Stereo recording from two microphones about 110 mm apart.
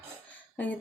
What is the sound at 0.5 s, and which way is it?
Speech, 15° left (ahead or behind).